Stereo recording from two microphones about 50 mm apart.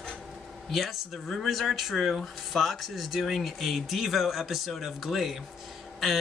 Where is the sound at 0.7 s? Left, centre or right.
Centre.